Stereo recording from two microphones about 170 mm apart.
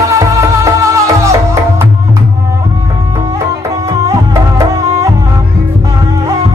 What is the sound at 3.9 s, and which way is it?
Music, 20° right (ahead or behind).